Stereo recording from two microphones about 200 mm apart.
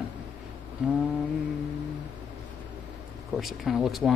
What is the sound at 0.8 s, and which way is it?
Speech, 5° right (ahead or behind).